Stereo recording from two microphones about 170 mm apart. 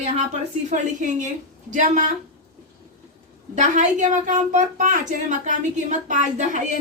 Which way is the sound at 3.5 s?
45° right (ahead or behind).